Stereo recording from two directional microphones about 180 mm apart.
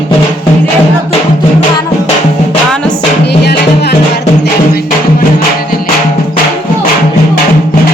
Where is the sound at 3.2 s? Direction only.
65° left (ahead or behind).